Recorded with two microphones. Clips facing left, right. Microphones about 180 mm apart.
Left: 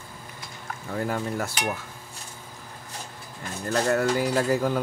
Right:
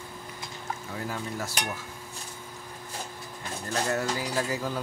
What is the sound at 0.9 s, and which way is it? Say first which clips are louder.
Speech: left 8 dB; 55° left (ahead or behind).